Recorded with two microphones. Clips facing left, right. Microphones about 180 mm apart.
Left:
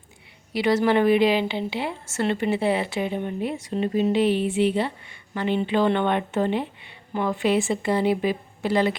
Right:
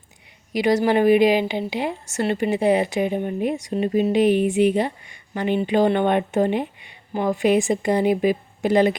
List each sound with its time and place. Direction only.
0.5 s speech: 15° right (ahead or behind)